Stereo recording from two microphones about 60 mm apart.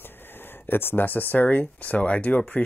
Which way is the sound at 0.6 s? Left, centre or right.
Left.